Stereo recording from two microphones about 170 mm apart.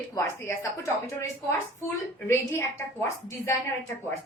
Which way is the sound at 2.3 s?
15° left (ahead or behind).